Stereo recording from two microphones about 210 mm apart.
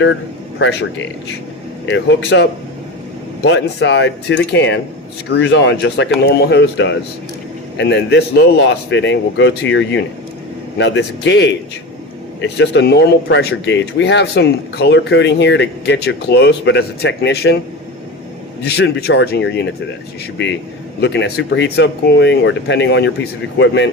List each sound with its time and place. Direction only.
0.6 s speech: 55° left (ahead or behind)
18.6 s speech: 50° left (ahead or behind)
21.0 s speech: 55° left (ahead or behind)